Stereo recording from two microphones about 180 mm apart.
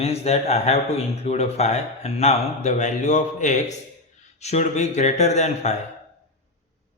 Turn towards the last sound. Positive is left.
turn(degrees=40)  # may be behind; listen again after turning